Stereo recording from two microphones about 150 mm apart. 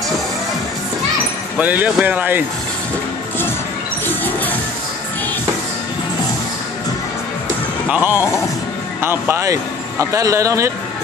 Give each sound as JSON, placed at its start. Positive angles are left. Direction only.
{"t": 1.6, "sound": "speech", "side_deg": -10}
{"t": 4.0, "sound": "a sound", "side_deg": 10}
{"t": 7.9, "sound": "speech", "side_deg": -10}